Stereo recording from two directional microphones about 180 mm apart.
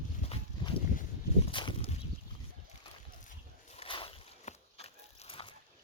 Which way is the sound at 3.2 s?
35° left (ahead or behind).